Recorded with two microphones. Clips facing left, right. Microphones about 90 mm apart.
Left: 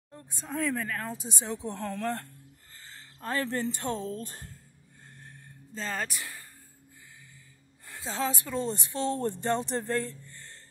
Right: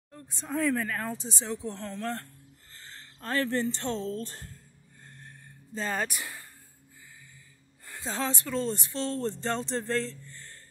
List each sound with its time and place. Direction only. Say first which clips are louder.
0.5 s speech: right 3 dB; 10° right (ahead or behind)
1.0 s speech: right 1 dB; 10° left (ahead or behind)
3.2 s speech: right 2 dB; 15° left (ahead or behind)
5.8 s speech: right 3 dB; 10° right (ahead or behind)
7.8 s speech: left 1 dB; centre (ahead or behind)
10.3 s music: right 1 dB; 20° left (ahead or behind)